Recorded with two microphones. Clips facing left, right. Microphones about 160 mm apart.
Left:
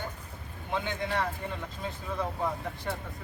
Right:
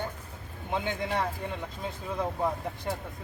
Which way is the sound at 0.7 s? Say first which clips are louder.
Right 1 dB; 20° right (ahead or behind).